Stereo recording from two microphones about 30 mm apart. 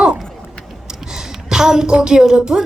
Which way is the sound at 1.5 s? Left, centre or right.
Centre.